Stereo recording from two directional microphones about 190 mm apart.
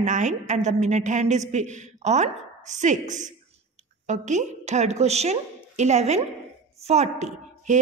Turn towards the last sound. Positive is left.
turn(degrees=-40)  # may be behind; listen again after turning